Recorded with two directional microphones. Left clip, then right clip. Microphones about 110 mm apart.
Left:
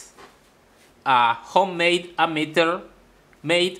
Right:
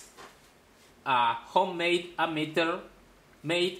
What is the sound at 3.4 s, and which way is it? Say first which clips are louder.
Speech: left 8 dB; 45° left (ahead or behind).